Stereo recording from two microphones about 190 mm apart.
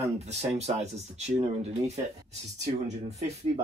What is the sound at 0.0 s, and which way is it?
Speech, 35° right (ahead or behind).